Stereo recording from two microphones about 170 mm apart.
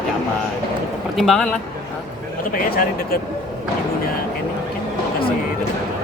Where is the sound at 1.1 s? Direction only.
Centre (ahead or behind).